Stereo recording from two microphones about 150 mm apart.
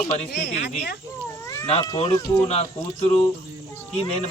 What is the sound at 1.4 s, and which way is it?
Cat, 20° left (ahead or behind).